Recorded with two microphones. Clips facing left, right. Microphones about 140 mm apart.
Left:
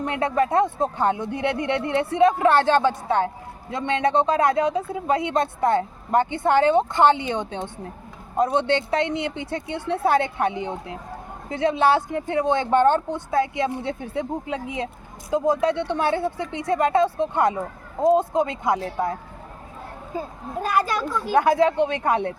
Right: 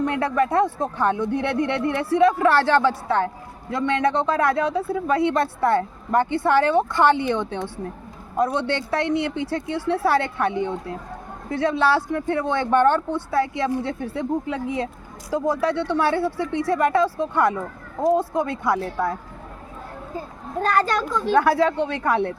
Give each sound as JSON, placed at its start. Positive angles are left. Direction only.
{"t": 0.1, "sound": "speech", "side_deg": 20}
{"t": 20.6, "sound": "a child's voice", "side_deg": 10}
{"t": 21.3, "sound": "speech", "side_deg": 20}